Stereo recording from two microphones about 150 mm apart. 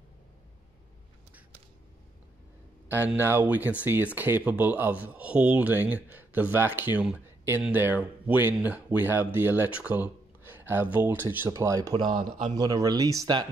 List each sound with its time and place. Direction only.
2.9 s speech: 15° right (ahead or behind)
12.1 s speech: 50° right (ahead or behind)
12.5 s speech: 25° right (ahead or behind)